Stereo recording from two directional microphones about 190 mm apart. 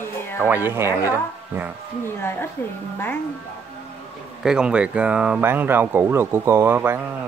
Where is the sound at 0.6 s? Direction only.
10° right (ahead or behind).